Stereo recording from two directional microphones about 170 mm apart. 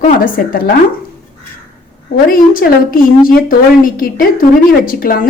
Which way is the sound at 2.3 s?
55° left (ahead or behind).